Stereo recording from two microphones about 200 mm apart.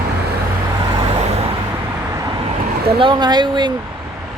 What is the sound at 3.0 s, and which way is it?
Speech, 25° right (ahead or behind).